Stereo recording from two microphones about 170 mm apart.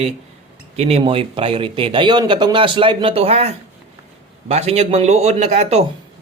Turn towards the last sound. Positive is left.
turn(degrees=-40)  # may be behind; listen again after turning